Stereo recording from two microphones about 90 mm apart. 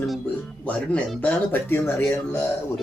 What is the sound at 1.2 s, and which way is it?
Speech, 20° left (ahead or behind).